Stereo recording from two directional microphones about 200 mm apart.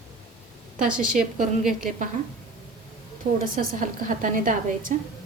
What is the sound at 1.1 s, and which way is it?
Speech, 40° right (ahead or behind).